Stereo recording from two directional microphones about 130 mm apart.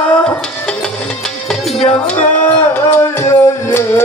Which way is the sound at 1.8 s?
10° left (ahead or behind).